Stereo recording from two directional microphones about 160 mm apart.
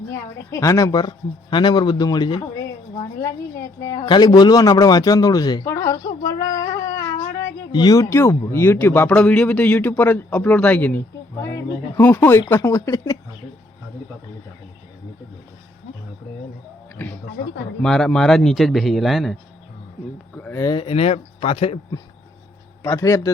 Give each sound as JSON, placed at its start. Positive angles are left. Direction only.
{"t": 0.1, "sound": "a woman's voice", "side_deg": 20}
{"t": 17.0, "sound": "a man's voice", "side_deg": 10}
{"t": 20.3, "sound": "a sound", "side_deg": 10}
{"t": 20.6, "sound": "speech", "side_deg": 25}
{"t": 22.8, "sound": "a woman's voice", "side_deg": 20}